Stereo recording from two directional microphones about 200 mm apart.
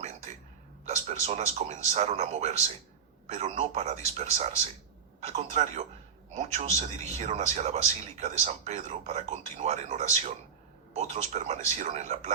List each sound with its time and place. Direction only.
0.9 s a man's voice: 35° right (ahead or behind)